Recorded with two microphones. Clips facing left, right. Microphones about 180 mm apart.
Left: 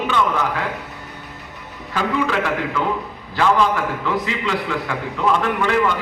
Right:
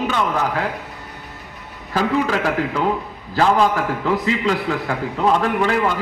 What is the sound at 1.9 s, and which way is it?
A man's voice, 40° right (ahead or behind).